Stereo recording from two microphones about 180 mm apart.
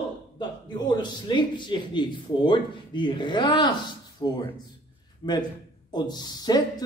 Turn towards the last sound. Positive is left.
turn(degrees=20)  # may be behind; listen again after turning